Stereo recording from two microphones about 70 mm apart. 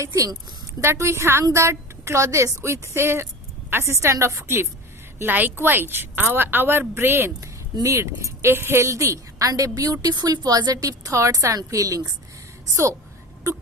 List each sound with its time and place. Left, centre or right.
0.0 s a woman's voice: right
7.4 s speech: right
12.7 s speech: right